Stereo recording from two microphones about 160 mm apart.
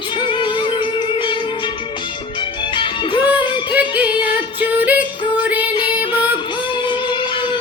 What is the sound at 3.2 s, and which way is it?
Music, 10° right (ahead or behind).